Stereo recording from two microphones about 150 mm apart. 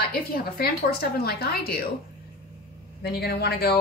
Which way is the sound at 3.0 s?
90° left.